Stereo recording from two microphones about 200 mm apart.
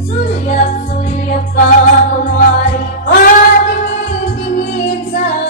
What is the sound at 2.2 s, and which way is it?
Music, 40° left (ahead or behind).